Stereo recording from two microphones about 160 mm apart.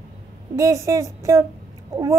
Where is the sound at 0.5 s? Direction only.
20° right (ahead or behind).